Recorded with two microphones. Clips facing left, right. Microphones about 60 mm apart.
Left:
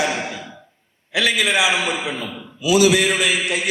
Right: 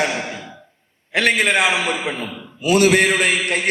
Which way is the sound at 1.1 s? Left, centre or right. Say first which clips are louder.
Right 2 dB; right.